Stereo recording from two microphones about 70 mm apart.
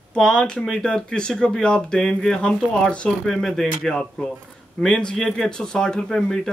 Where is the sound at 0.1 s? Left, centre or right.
Centre.